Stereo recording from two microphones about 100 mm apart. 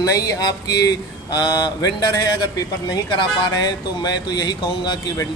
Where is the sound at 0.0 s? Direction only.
40° left (ahead or behind).